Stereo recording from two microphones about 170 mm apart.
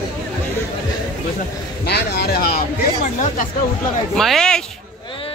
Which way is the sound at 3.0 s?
45° left (ahead or behind).